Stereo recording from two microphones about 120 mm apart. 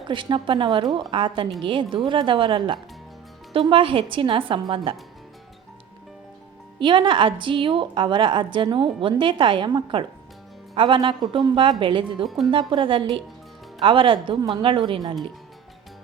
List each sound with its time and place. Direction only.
0.1 s a woman's voice: 45° right (ahead or behind)
6.7 s a woman's voice: 40° right (ahead or behind)